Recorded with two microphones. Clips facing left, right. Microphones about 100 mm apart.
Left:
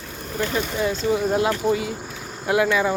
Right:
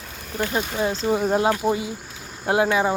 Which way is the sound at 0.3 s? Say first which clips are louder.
Even; 30° right (ahead or behind).